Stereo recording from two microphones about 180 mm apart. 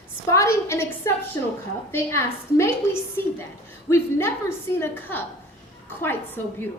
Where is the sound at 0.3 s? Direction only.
15° left (ahead or behind).